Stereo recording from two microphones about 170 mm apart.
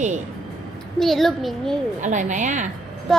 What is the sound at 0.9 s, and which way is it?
Speech, centre (ahead or behind).